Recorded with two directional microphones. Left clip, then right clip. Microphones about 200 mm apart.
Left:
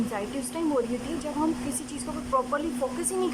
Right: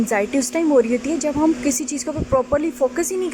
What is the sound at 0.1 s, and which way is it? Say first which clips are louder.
Speech: right 12 dB; 25° right (ahead or behind).